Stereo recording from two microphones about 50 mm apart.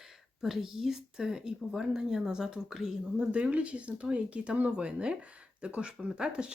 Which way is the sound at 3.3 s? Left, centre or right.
Right.